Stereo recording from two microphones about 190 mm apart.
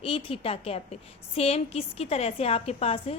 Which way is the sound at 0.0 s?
30° left (ahead or behind).